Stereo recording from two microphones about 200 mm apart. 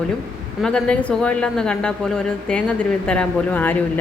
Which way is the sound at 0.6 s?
5° left (ahead or behind).